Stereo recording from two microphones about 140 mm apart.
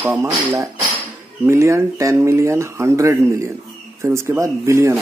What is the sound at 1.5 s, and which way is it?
Speech, 20° right (ahead or behind).